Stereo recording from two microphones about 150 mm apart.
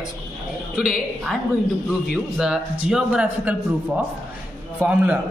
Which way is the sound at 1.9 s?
Centre (ahead or behind).